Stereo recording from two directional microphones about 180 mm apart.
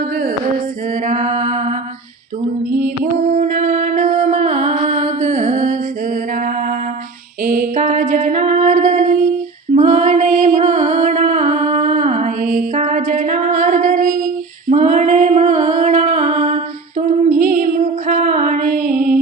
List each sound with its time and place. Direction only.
1.0 s mantra: 40° right (ahead or behind)
3.0 s music: 45° right (ahead or behind)
7.4 s music: 50° right (ahead or behind)
17.1 s music: 50° right (ahead or behind)